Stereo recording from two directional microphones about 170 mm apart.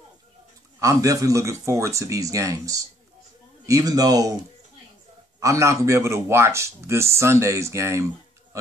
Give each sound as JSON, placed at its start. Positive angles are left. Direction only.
{"t": 0.7, "sound": "speech", "side_deg": -20}
{"t": 5.4, "sound": "speech", "side_deg": -15}